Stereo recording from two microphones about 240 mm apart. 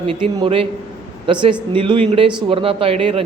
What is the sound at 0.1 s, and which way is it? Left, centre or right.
Speech, right.